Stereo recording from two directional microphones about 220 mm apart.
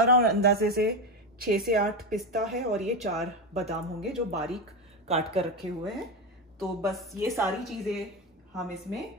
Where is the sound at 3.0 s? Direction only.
30° right (ahead or behind).